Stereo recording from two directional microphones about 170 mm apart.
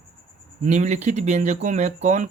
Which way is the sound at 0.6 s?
40° right (ahead or behind).